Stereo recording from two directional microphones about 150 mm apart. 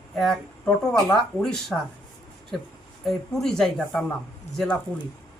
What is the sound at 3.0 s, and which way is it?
Speech, 5° left (ahead or behind).